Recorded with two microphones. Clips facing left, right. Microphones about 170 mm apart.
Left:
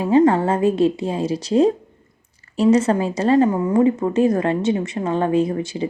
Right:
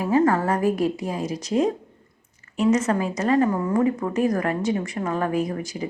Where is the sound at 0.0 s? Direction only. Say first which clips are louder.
Left 5 dB; 25° left (ahead or behind).